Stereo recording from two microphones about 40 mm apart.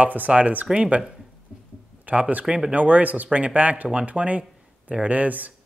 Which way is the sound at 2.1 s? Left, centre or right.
Right.